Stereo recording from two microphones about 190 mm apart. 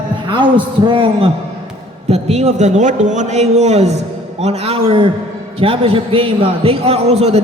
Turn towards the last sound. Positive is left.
turn(degrees=-35)  # may be behind; listen again after turning